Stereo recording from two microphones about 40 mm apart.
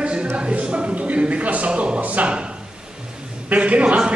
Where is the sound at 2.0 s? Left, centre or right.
Right.